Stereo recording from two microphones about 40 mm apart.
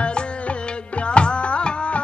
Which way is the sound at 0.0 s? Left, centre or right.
Left.